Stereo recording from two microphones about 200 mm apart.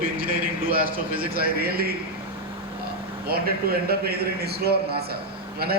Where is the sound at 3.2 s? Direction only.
50° right (ahead or behind).